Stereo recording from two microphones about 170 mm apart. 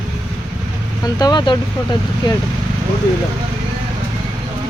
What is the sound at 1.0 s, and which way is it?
Speech, 25° left (ahead or behind).